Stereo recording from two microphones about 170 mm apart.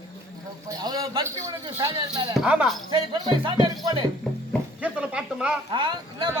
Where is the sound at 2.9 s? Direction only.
30° right (ahead or behind).